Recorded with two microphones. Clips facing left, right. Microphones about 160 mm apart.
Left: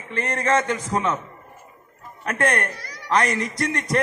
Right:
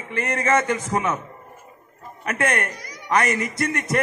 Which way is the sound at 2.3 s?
20° right (ahead or behind).